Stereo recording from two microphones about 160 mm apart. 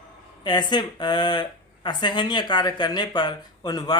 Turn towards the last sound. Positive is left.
turn(degrees=25)  # may be behind; listen again after turning